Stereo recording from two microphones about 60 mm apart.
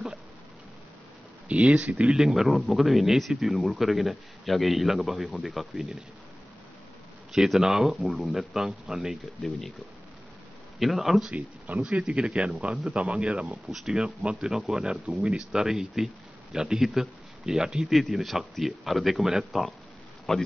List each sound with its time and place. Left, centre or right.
1.5 s speech: centre
2.1 s speech: centre
7.3 s speech: centre
10.8 s speech: centre
13.7 s speech: centre